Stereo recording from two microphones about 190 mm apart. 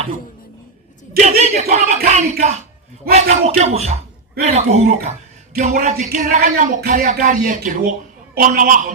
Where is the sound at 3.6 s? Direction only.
35° right (ahead or behind).